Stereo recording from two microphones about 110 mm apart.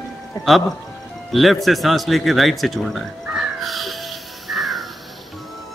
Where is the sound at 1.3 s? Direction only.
Centre (ahead or behind).